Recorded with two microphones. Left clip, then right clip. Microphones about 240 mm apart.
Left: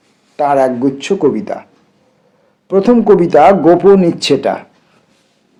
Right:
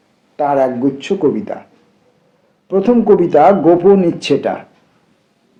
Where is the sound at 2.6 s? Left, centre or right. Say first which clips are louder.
Left 2 dB; left.